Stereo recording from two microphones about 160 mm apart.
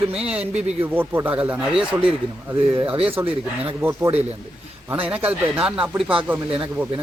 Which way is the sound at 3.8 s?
20° right (ahead or behind).